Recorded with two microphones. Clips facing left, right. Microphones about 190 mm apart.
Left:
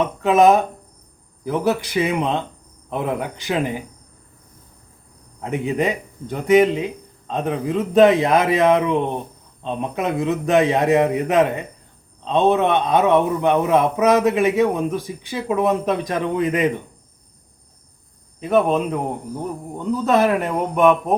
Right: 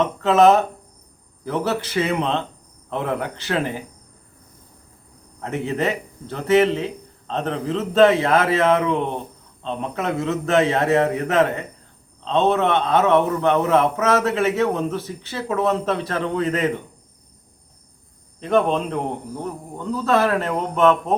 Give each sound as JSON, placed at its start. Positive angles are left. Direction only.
{"t": 0.0, "sound": "a man's voice", "side_deg": 15}
{"t": 5.4, "sound": "a man's voice", "side_deg": 15}
{"t": 18.3, "sound": "a man's voice", "side_deg": 10}
{"t": 19.8, "sound": "a man's voice", "side_deg": 20}